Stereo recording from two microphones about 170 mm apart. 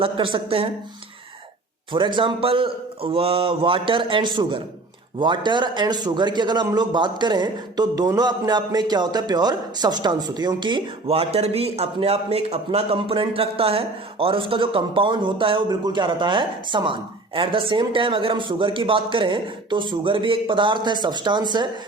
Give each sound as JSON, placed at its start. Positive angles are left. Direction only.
{"t": 0.0, "sound": "speech", "side_deg": -30}
{"t": 1.9, "sound": "a man's voice", "side_deg": -30}